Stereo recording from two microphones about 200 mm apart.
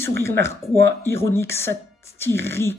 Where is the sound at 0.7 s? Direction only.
60° right (ahead or behind).